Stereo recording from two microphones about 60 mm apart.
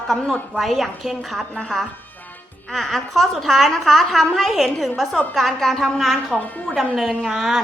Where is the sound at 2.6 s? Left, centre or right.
Centre.